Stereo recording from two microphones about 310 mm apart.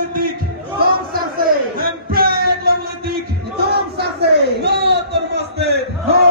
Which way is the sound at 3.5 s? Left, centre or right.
Right.